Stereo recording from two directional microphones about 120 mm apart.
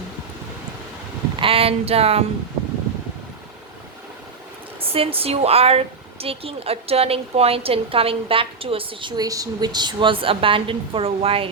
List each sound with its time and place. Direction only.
1.4 s speech: 50° right (ahead or behind)
4.8 s speech: 50° right (ahead or behind)